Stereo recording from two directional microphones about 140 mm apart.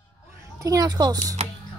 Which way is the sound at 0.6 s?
25° right (ahead or behind).